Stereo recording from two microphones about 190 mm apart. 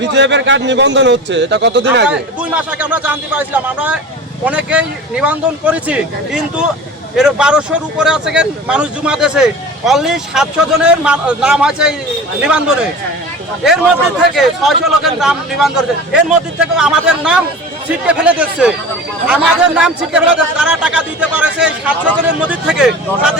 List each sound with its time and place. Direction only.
0.0 s a man's voice: 70° right (ahead or behind)
2.0 s speech: 5° right (ahead or behind)
14.3 s speech: centre (ahead or behind)